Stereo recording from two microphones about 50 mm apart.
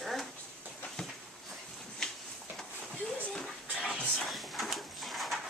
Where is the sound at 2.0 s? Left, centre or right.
Centre.